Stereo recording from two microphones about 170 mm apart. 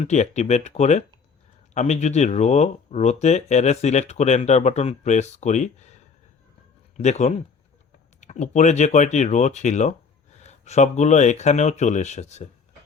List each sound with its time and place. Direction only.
0.0 s speech: 45° left (ahead or behind)